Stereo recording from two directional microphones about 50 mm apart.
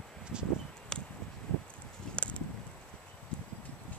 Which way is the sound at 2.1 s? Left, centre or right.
Left.